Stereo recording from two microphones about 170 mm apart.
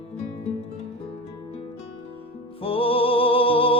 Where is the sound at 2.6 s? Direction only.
30° left (ahead or behind).